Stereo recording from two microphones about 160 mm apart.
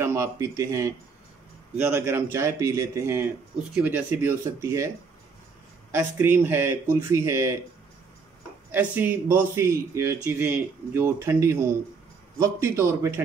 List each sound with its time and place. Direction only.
0.0 s speech: 15° right (ahead or behind)
8.7 s speech: 10° right (ahead or behind)